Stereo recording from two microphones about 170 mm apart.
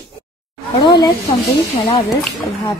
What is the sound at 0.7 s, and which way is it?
A woman's voice, 25° left (ahead or behind).